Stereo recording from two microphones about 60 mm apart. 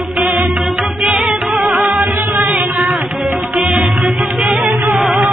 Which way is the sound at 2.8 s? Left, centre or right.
Centre.